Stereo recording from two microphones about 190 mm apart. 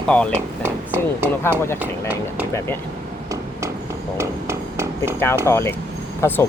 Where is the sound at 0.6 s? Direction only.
10° right (ahead or behind).